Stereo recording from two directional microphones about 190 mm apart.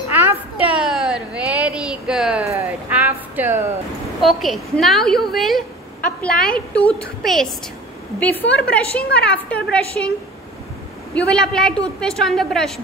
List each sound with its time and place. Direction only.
0.1 s a sound: 10° right (ahead or behind)
4.2 s a woman's voice: centre (ahead or behind)
8.2 s a woman's voice: 10° left (ahead or behind)
11.1 s a woman's voice: 5° left (ahead or behind)